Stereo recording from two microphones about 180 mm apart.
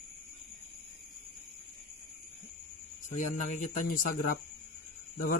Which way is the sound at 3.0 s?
45° left (ahead or behind).